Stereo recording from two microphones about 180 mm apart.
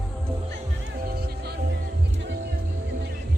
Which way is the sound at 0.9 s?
55° right (ahead or behind).